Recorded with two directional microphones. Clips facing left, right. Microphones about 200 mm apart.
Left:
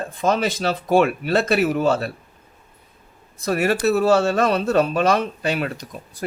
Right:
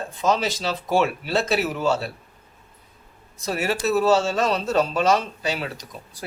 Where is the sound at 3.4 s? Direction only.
55° left (ahead or behind).